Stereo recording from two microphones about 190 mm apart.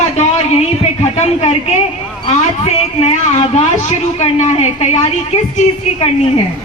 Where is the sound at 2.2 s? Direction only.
35° left (ahead or behind).